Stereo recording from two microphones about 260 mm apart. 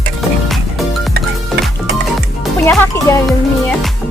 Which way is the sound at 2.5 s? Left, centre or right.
Centre.